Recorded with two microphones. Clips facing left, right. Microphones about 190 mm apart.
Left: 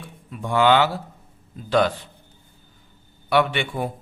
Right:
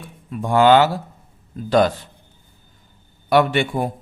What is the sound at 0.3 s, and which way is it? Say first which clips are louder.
Speech: right 4 dB; 45° right (ahead or behind).